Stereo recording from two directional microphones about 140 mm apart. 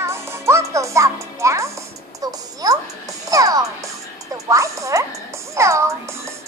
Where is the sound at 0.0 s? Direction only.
20° right (ahead or behind).